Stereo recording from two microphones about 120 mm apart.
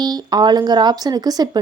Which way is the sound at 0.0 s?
35° right (ahead or behind).